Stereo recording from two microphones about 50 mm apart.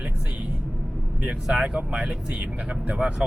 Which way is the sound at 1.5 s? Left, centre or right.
Right.